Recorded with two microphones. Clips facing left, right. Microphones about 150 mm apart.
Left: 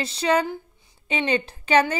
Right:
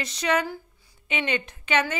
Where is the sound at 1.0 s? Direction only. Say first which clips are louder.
Left 4 dB; 35° left (ahead or behind).